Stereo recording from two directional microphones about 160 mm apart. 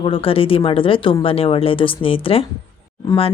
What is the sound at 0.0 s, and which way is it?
A woman's voice, 35° left (ahead or behind).